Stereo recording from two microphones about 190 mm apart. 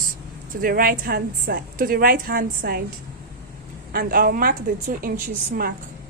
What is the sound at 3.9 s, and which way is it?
A woman's voice, 50° right (ahead or behind).